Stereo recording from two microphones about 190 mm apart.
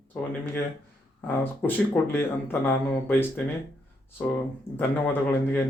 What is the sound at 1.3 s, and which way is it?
Speech, 10° left (ahead or behind).